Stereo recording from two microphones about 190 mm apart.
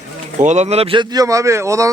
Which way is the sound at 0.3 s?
40° right (ahead or behind).